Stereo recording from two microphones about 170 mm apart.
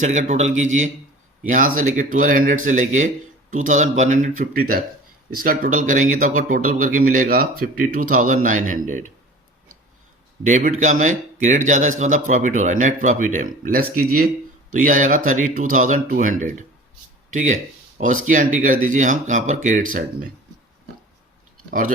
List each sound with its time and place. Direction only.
0.0 s speech: 45° right (ahead or behind)
10.4 s speech: 50° right (ahead or behind)
21.7 s speech: 50° right (ahead or behind)